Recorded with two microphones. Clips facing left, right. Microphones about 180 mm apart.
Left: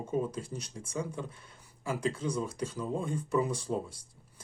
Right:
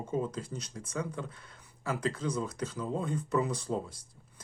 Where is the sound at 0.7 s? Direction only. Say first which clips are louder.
Even; 30° left (ahead or behind).